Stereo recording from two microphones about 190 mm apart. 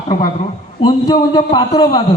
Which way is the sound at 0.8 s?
20° left (ahead or behind).